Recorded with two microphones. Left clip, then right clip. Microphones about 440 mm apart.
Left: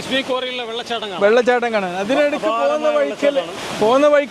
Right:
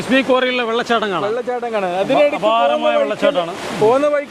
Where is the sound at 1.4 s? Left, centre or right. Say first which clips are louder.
Left 6 dB; left.